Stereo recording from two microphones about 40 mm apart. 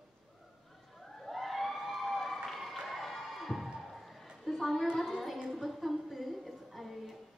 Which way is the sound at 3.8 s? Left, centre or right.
Centre.